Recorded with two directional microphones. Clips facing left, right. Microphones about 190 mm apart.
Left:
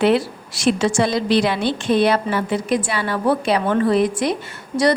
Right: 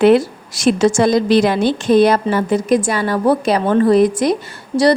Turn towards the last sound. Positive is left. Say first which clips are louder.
# right 4 dB
turn(degrees=-35)  # may be behind; listen again after turning